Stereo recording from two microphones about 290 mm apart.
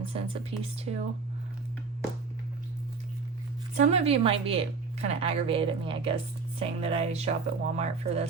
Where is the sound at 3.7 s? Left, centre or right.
Right.